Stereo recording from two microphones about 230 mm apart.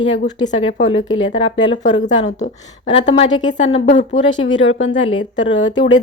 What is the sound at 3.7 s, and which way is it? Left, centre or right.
Speech, left.